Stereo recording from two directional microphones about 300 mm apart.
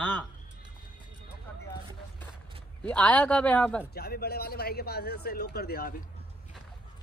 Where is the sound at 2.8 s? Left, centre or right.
Centre.